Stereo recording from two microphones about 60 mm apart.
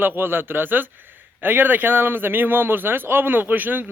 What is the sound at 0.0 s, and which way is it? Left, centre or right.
A man's voice, right.